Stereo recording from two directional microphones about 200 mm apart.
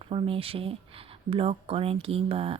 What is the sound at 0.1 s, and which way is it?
A woman's voice, 25° right (ahead or behind).